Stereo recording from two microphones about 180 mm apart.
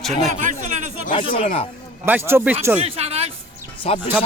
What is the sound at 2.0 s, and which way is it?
Speech, 15° right (ahead or behind).